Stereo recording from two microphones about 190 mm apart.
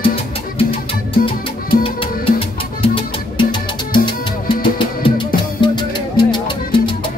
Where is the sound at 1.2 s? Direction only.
30° left (ahead or behind).